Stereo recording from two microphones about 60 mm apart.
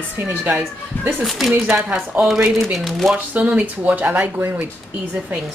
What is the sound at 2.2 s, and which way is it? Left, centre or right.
Speech, centre.